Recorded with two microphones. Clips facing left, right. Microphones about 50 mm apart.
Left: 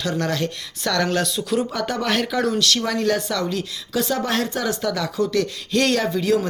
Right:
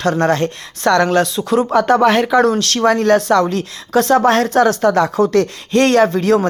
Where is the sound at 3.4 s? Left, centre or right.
Right.